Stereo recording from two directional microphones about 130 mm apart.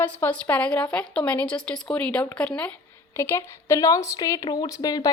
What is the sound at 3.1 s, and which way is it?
Speech, 20° left (ahead or behind).